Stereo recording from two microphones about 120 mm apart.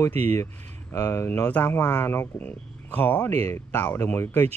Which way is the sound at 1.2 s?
15° left (ahead or behind).